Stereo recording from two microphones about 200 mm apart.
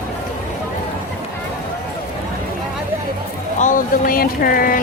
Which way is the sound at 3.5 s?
40° left (ahead or behind).